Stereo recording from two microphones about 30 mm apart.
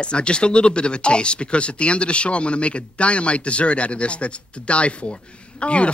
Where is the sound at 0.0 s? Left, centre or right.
Left.